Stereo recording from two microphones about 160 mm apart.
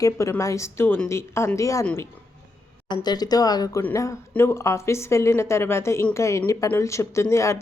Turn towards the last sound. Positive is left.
turn(degrees=15)  # may be behind; listen again after turning